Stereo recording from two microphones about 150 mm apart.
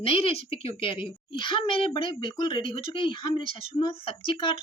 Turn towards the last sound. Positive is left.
turn(degrees=35)  # may be behind; listen again after turning